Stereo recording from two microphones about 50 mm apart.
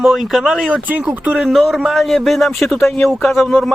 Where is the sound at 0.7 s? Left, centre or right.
Right.